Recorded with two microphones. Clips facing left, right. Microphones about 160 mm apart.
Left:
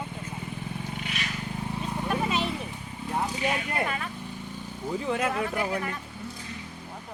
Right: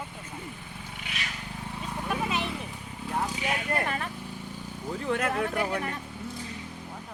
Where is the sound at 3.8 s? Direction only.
40° right (ahead or behind).